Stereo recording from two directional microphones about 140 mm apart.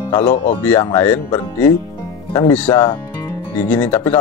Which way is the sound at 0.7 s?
15° left (ahead or behind).